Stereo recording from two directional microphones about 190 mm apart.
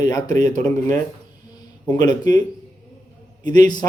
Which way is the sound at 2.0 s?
20° left (ahead or behind).